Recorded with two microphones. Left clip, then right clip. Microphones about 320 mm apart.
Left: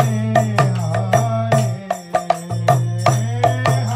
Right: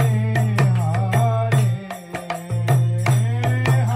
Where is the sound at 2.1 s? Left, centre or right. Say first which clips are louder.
Left 10 dB; left.